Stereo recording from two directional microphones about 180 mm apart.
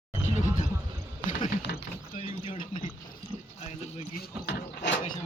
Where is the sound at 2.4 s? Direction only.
45° left (ahead or behind).